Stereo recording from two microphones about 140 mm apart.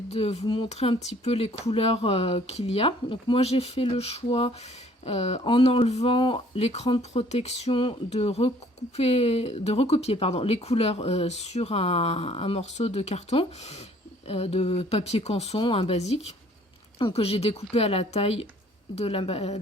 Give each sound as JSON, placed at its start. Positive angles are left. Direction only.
{"t": 0.1, "sound": "speech", "side_deg": 45}